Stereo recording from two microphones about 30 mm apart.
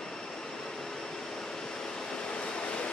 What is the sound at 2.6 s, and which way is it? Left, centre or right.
Train, left.